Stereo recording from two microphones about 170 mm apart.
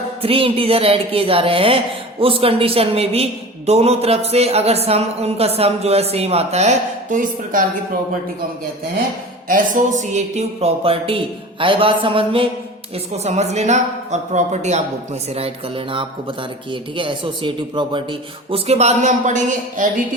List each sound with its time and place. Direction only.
0.2 s a woman's voice: 35° right (ahead or behind); by 7.6 s 50° right (ahead or behind)
9.5 s a woman's voice: 50° right (ahead or behind)